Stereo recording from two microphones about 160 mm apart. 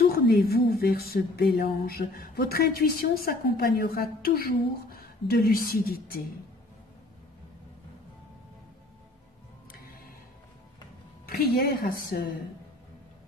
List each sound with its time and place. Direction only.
0.3 s a woman's voice: 70° left (ahead or behind)
11.2 s a woman's voice: 70° left (ahead or behind)